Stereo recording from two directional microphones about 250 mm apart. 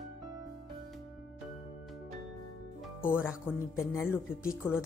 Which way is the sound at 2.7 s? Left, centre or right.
Centre.